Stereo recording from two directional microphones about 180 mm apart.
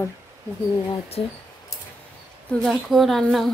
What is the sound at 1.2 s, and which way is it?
Speech, 35° left (ahead or behind).